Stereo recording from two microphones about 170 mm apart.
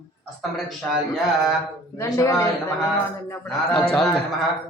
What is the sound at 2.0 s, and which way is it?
A man's voice, 20° left (ahead or behind).